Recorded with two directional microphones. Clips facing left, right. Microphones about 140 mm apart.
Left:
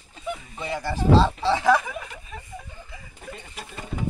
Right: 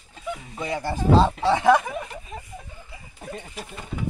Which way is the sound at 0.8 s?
50° right (ahead or behind).